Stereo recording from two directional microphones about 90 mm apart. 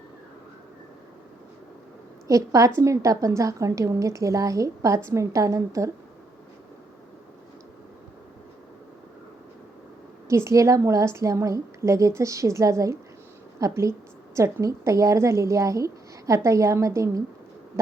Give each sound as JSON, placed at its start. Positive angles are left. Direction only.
{"t": 2.2, "sound": "a woman's voice", "side_deg": -40}
{"t": 10.2, "sound": "a woman's voice", "side_deg": -30}